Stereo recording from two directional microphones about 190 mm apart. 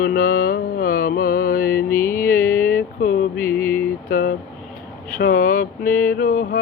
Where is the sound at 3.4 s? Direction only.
10° left (ahead or behind).